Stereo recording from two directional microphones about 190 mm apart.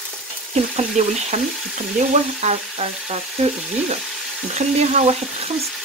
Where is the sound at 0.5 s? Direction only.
35° right (ahead or behind).